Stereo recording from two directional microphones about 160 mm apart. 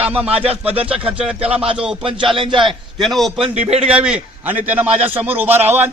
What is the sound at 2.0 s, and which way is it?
Speech, 35° right (ahead or behind).